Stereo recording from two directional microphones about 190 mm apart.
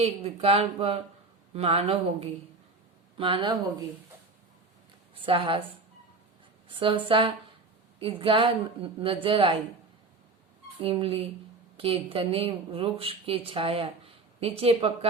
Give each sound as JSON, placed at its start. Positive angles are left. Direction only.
{"t": 0.0, "sound": "a woman's voice", "side_deg": -30}
{"t": 5.2, "sound": "a woman's voice", "side_deg": -25}
{"t": 10.8, "sound": "a woman's voice", "side_deg": -30}